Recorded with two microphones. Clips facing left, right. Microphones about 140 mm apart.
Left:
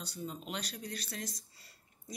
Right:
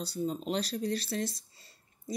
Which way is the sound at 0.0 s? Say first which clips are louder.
Right 9 dB; 35° right (ahead or behind).